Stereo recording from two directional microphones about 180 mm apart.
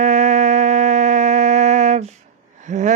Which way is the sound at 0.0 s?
40° right (ahead or behind).